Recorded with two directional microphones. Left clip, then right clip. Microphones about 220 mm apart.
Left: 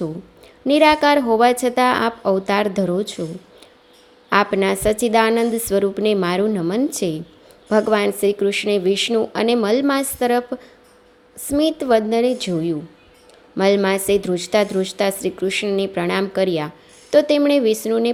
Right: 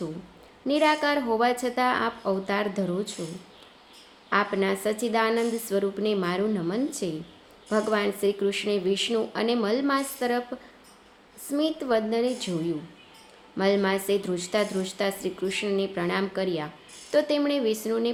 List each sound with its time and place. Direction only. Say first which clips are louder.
0.6 s a woman's voice: left 9 dB; 35° left (ahead or behind)
4.3 s a woman's voice: left 8 dB; 40° left (ahead or behind)